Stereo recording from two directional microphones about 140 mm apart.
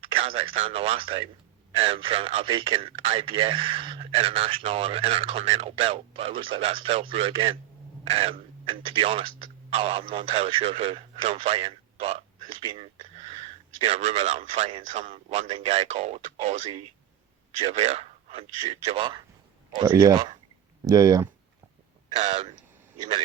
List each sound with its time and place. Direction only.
0.0 s speech: 40° right (ahead or behind)
17.6 s speech: 50° right (ahead or behind)
20.0 s speech: 25° right (ahead or behind)
22.2 s speech: 55° right (ahead or behind)